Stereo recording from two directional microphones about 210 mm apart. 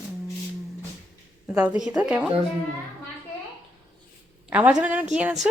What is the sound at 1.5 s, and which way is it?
Speech, 5° right (ahead or behind).